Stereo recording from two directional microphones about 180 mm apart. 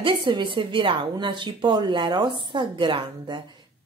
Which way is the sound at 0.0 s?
25° right (ahead or behind).